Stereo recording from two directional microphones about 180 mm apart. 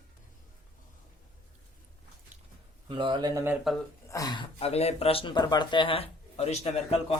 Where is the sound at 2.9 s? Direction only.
25° right (ahead or behind).